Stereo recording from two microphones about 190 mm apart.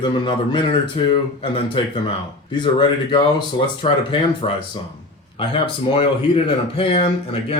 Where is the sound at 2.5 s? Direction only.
25° left (ahead or behind).